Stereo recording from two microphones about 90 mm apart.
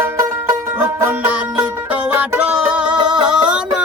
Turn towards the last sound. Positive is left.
turn(degrees=-10)  # may be behind; listen again after turning